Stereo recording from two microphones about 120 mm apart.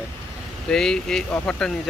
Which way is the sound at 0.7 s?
5° left (ahead or behind).